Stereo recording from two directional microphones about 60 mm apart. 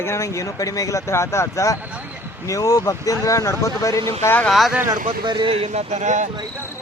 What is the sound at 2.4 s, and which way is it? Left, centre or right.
Speech, left.